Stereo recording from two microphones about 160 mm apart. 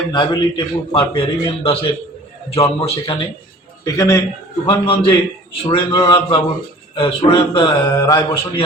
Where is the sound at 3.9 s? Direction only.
20° left (ahead or behind).